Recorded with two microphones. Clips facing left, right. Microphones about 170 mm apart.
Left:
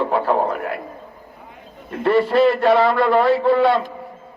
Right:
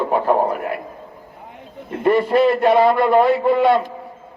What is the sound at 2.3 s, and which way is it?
A man's voice, 15° right (ahead or behind).